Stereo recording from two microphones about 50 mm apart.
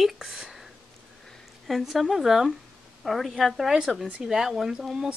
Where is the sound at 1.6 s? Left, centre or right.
Centre.